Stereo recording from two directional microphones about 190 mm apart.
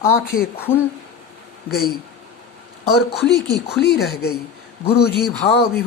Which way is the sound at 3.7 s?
60° left (ahead or behind).